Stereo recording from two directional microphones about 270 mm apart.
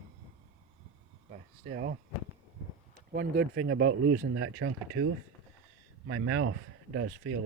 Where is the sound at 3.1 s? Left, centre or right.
Right.